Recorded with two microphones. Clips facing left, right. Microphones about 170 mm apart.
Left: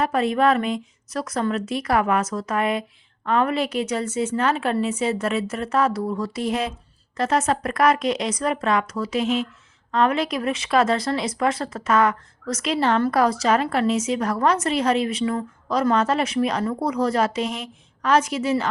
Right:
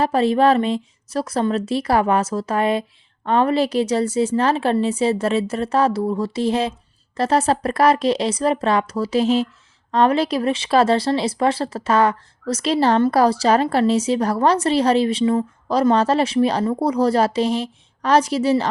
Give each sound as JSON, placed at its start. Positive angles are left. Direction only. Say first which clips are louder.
{"t": 0.0, "sound": "a woman's voice", "louder": "right 4 dB", "side_deg": -30}